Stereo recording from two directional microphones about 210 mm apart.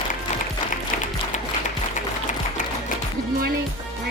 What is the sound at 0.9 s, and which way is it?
Music, 40° left (ahead or behind).